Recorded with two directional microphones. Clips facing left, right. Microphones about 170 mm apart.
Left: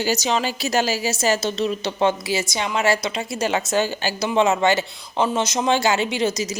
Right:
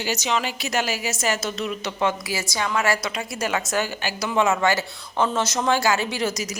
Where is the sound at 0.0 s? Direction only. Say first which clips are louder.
Left 3 dB; 35° left (ahead or behind).